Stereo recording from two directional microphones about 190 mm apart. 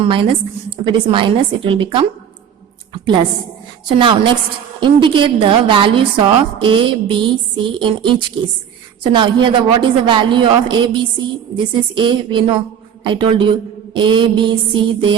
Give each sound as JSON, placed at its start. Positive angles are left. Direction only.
{"t": 0.0, "sound": "a woman's voice", "side_deg": -30}
{"t": 2.9, "sound": "a sound", "side_deg": -25}
{"t": 3.8, "sound": "a woman's voice", "side_deg": -25}